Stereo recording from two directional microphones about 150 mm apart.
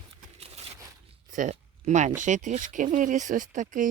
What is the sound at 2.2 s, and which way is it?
Speech, 55° right (ahead or behind).